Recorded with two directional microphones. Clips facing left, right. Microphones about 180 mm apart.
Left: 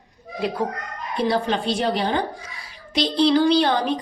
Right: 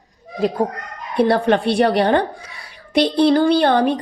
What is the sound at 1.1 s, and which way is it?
Speech, 60° right (ahead or behind).